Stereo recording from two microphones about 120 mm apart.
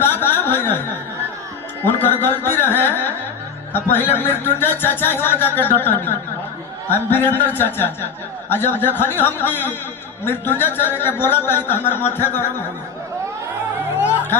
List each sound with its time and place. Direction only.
0.0 s a sound: 20° left (ahead or behind)
2.0 s speech: 15° left (ahead or behind)
6.9 s speech: 20° left (ahead or behind)